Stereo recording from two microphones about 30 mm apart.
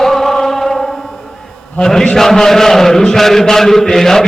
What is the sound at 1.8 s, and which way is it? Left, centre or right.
A man's voice, left.